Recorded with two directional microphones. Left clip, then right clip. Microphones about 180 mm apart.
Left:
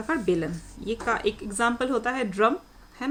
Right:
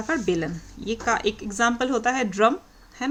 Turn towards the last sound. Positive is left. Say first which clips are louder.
# right 2 dB
turn(degrees=-15)  # may be behind; listen again after turning